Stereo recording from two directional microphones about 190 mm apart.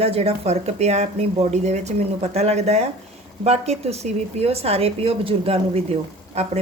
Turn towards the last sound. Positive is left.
turn(degrees=-35)  # may be behind; listen again after turning